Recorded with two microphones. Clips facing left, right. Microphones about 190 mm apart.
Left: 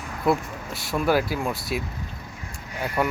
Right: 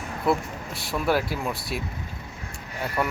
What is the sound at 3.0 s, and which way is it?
Speech, centre (ahead or behind).